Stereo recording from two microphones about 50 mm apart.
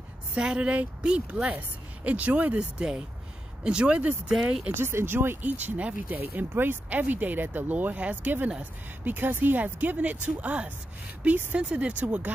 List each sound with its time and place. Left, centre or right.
0.4 s speech: right
2.8 s speech: centre
4.7 s speech: right
5.4 s speech: right
6.5 s speech: right